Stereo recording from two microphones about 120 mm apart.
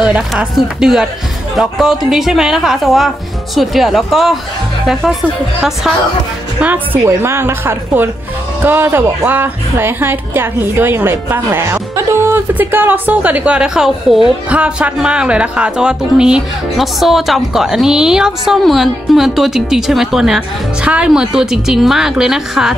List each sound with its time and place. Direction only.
0.3 s a woman's voice: 5° right (ahead or behind)
6.6 s a woman's voice: 15° right (ahead or behind)